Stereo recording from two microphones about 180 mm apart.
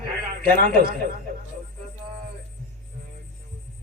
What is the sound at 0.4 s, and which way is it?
Speech, 55° right (ahead or behind).